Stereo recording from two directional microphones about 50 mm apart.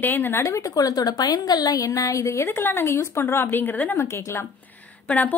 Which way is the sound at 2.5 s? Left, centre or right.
Left.